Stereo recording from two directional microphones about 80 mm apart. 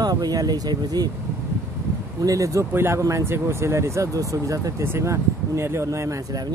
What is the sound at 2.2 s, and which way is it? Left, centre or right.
Speech, right.